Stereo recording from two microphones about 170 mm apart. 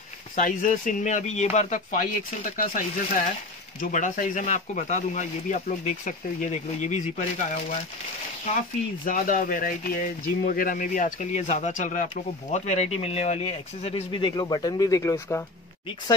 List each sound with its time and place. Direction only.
0.4 s speech: 50° left (ahead or behind)
9.0 s speech: 50° left (ahead or behind); by 15.4 s 15° left (ahead or behind)